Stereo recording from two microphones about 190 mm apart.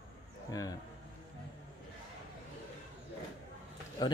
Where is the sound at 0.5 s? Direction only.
20° left (ahead or behind).